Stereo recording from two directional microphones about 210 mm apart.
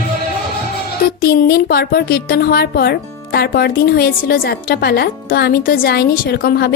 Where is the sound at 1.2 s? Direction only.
45° left (ahead or behind).